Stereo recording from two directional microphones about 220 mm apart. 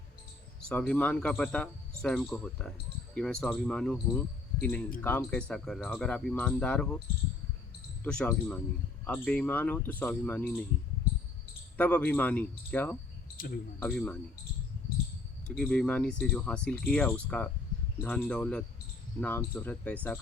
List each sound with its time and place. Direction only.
0.7 s speech: 5° left (ahead or behind)
8.0 s speech: 5° left (ahead or behind)
11.8 s speech: 5° left (ahead or behind)
13.3 s speech: 40° left (ahead or behind)
13.7 s speech: 5° left (ahead or behind)
15.4 s speech: 5° left (ahead or behind)